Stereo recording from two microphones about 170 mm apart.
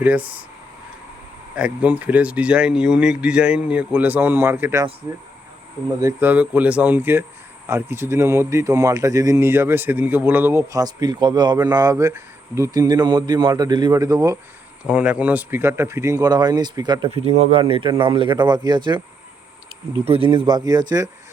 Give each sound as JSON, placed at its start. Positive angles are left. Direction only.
{"t": 0.0, "sound": "speech", "side_deg": -10}
{"t": 1.5, "sound": "speech", "side_deg": -5}
{"t": 6.0, "sound": "speech", "side_deg": -15}
{"t": 14.8, "sound": "speech", "side_deg": -5}
{"t": 17.1, "sound": "speech", "side_deg": -35}
{"t": 20.1, "sound": "speech", "side_deg": -30}